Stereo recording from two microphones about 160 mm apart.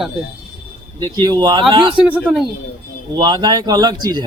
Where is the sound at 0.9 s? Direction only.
25° right (ahead or behind).